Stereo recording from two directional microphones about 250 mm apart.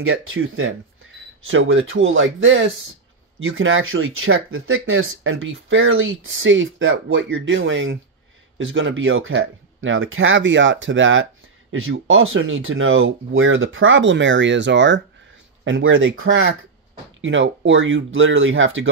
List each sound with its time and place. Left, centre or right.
0.0 s speech: right